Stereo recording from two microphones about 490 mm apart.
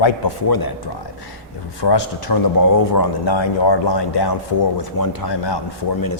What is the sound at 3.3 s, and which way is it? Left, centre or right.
A man's voice, left.